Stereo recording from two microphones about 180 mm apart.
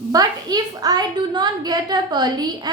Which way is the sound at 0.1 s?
20° right (ahead or behind).